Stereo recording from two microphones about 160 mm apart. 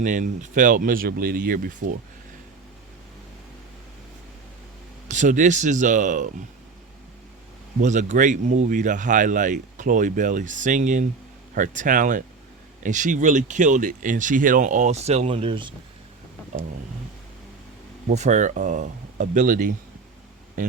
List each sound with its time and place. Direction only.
0.0 s speech: 50° right (ahead or behind)
5.1 s speech: 50° right (ahead or behind)
7.8 s speech: 50° right (ahead or behind); by 15.7 s 30° right (ahead or behind)
18.1 s speech: 45° right (ahead or behind)